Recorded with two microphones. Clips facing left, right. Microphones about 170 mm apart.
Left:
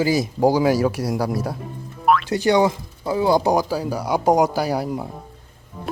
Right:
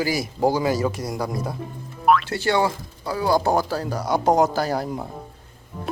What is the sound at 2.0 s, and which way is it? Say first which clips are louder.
Music: even; centre (ahead or behind).